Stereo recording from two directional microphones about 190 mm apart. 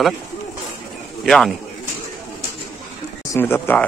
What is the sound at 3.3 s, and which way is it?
Speech, 10° left (ahead or behind).